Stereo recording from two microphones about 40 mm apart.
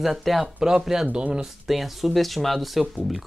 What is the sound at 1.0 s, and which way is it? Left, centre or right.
Speech, right.